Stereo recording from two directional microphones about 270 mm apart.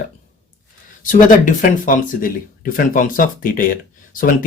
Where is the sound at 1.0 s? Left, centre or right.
Left.